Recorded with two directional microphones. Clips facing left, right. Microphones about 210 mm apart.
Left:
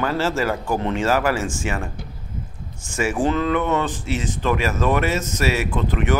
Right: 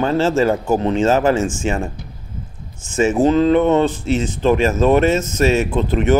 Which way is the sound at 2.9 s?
25° right (ahead or behind).